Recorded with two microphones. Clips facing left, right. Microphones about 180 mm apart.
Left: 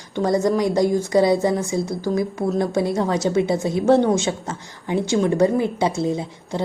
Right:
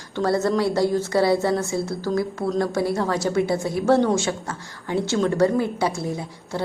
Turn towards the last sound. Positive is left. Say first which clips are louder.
# left 3 dB
turn(degrees=20)  # may be behind; listen again after turning